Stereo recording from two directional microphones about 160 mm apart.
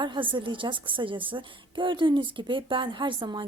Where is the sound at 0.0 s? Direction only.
30° right (ahead or behind).